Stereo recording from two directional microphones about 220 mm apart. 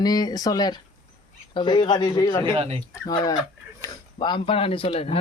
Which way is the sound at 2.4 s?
25° right (ahead or behind).